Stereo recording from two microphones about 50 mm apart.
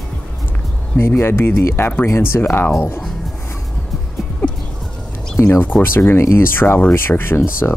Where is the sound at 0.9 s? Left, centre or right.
Left.